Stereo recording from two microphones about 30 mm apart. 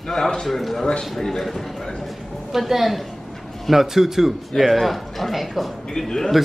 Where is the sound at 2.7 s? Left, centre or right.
Centre.